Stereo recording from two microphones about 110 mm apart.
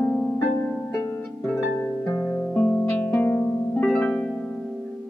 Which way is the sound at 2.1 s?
25° left (ahead or behind).